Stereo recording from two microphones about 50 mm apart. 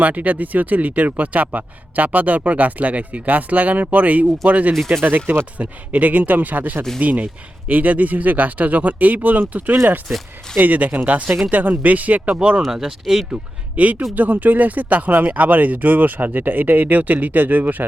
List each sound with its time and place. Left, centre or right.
0.0 s speech: right
5.2 s speech: right
5.5 s speech: right
12.4 s speech: centre
12.7 s speech: centre
13.7 s speech: right